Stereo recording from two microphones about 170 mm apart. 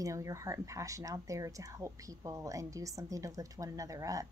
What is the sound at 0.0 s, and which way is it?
A woman's voice, 20° right (ahead or behind).